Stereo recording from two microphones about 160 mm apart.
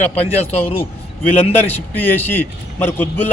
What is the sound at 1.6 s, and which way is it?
A man's voice, 10° left (ahead or behind).